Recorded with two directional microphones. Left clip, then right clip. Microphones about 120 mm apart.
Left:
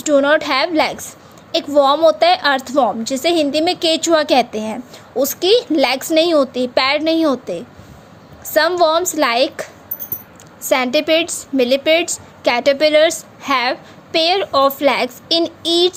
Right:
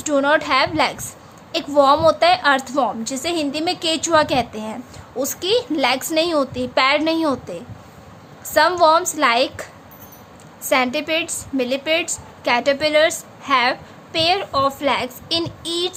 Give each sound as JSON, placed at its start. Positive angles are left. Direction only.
{"t": 0.0, "sound": "a woman's voice", "side_deg": 30}
{"t": 10.6, "sound": "a sound", "side_deg": 50}
{"t": 10.9, "sound": "a woman's voice", "side_deg": 45}